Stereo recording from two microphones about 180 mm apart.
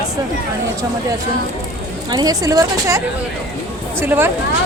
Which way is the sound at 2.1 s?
20° right (ahead or behind).